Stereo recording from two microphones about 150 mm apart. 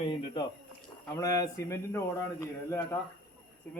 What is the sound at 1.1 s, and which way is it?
Speech, 20° left (ahead or behind).